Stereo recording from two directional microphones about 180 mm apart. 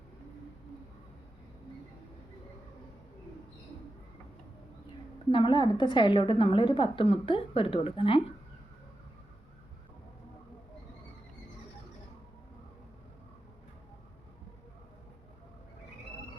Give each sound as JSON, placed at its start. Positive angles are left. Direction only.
{"t": 5.3, "sound": "a woman's voice", "side_deg": 25}